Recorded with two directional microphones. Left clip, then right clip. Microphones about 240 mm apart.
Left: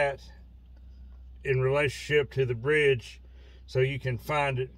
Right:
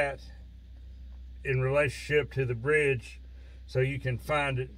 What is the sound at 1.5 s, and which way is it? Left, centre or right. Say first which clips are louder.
Speech: left 1 dB; centre.